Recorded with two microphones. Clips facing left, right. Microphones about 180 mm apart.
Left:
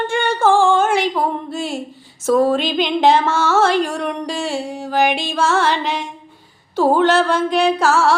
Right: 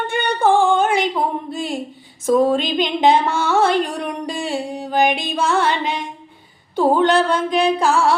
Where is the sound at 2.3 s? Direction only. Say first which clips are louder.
Even; 5° left (ahead or behind).